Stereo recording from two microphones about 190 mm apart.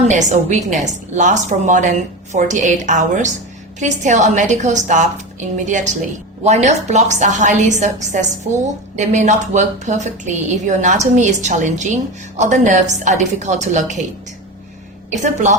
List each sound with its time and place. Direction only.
0.1 s a woman's voice: 40° right (ahead or behind)
15.2 s a woman's voice: 40° right (ahead or behind)